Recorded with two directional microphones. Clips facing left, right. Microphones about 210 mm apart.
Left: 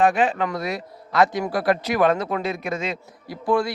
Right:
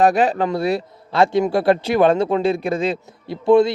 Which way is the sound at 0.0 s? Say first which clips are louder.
Right 4 dB; 35° right (ahead or behind).